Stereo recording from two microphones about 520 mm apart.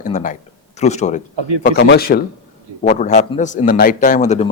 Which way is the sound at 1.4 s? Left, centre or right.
Right.